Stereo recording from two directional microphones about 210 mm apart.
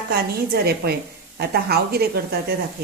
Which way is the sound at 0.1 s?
45° right (ahead or behind).